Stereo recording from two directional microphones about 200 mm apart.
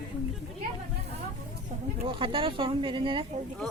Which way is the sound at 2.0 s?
25° right (ahead or behind).